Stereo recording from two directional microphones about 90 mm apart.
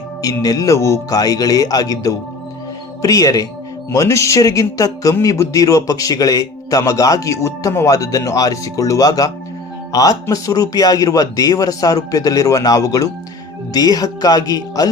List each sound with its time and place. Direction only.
0.4 s speech: 40° left (ahead or behind)